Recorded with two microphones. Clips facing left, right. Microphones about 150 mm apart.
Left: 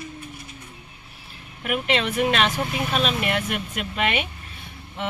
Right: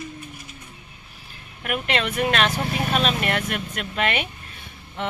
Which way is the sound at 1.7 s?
Centre (ahead or behind).